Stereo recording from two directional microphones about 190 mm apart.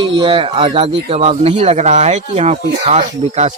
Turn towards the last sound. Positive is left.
turn(degrees=-35)  # may be behind; listen again after turning